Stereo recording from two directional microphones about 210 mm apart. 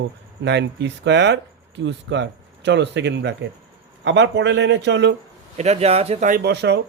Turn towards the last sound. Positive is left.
turn(degrees=-55)  # may be behind; listen again after turning